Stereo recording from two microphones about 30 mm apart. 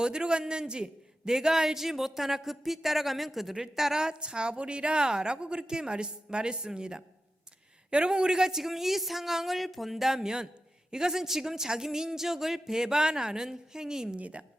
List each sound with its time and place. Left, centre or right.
0.0 s a man's voice: right
1.4 s speech: centre
3.5 s speech: centre
4.1 s a woman's voice: right
8.6 s speech: centre
14.2 s a woman's voice: right